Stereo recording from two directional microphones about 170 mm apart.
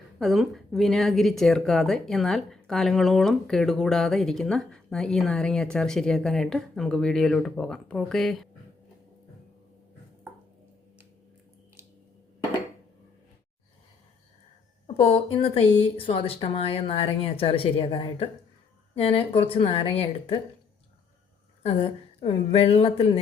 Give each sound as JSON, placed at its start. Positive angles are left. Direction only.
{"t": 0.2, "sound": "speech", "side_deg": 0}
{"t": 14.8, "sound": "speech", "side_deg": 35}
{"t": 21.6, "sound": "speech", "side_deg": 35}